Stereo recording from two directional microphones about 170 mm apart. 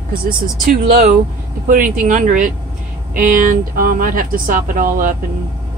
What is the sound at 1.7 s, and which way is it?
Speech, 55° right (ahead or behind).